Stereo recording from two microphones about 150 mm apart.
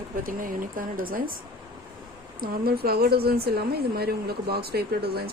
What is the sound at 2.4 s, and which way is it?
A woman's voice, 90° right.